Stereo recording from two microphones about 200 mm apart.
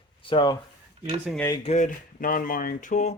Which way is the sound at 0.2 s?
25° left (ahead or behind).